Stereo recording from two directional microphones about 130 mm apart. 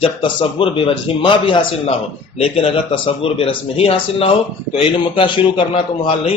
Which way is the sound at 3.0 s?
45° left (ahead or behind).